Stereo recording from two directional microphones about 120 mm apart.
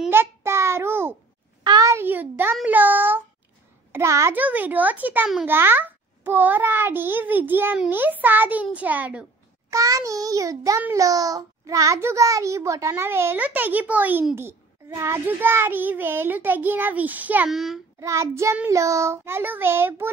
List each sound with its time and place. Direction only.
0.1 s child singing: 20° right (ahead or behind)
1.6 s a sound: 35° right (ahead or behind); by 3.3 s 15° right (ahead or behind)
3.9 s a child's voice: 25° right (ahead or behind)
4.4 s child singing: 15° right (ahead or behind)
9.7 s a child's voice: 25° right (ahead or behind)
15.0 s child singing: 20° right (ahead or behind)
17.5 s a child's voice: centre (ahead or behind)
17.9 s a child's voice: 25° right (ahead or behind)